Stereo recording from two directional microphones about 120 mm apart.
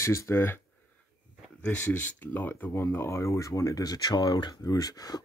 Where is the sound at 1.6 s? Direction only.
15° left (ahead or behind); by 5.2 s 30° left (ahead or behind).